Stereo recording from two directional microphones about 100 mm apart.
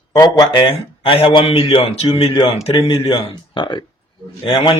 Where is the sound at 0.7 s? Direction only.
70° left (ahead or behind).